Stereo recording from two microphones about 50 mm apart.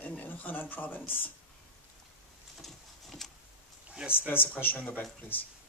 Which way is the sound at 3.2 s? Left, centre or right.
Centre.